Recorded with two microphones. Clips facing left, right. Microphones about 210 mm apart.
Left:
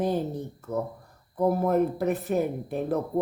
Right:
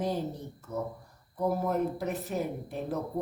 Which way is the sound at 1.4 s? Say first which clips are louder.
Left 6 dB; 55° left (ahead or behind).